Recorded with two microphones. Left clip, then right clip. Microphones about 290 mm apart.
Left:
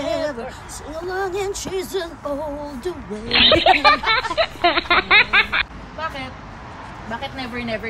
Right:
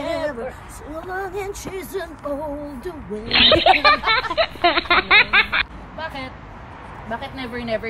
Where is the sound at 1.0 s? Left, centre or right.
Centre.